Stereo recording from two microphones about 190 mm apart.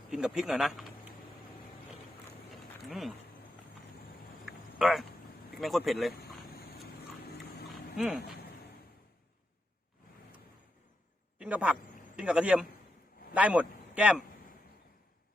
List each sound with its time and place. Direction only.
0.3 s speech: 5° right (ahead or behind)
2.8 s speech: centre (ahead or behind)
4.4 s a sound: centre (ahead or behind)
5.5 s speech: centre (ahead or behind)
6.1 s vehicle: 55° left (ahead or behind)
7.3 s dog: 55° left (ahead or behind)
7.7 s a sound: centre (ahead or behind)
11.3 s a man's voice: 5° right (ahead or behind)